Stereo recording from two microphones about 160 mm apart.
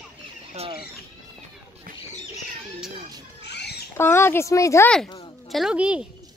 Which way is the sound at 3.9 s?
15° left (ahead or behind).